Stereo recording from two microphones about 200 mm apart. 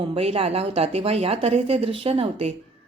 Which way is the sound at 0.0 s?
30° right (ahead or behind).